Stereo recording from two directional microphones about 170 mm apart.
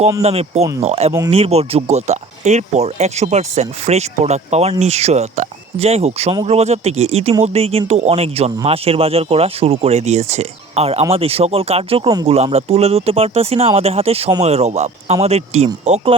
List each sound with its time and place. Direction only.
0.2 s speech: 40° right (ahead or behind)